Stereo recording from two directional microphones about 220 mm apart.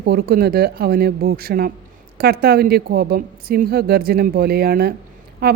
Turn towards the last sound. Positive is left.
turn(degrees=-45)  # may be behind; listen again after turning